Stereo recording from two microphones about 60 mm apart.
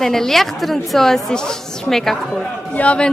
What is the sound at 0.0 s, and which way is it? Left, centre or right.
A man's voice, centre.